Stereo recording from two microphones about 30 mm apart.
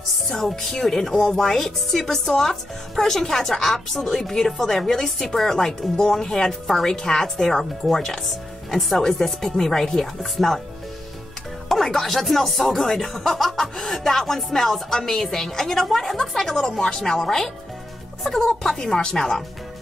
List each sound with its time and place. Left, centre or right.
0.7 s a woman's voice: centre
11.7 s speech: centre
16.6 s a woman's voice: left
18.5 s speech: centre
18.8 s a woman's voice: left